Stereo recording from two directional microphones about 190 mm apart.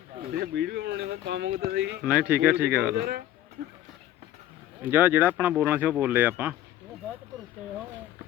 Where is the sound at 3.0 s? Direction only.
55° right (ahead or behind).